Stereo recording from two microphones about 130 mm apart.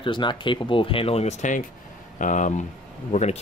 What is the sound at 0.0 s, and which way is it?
Speech, 40° left (ahead or behind).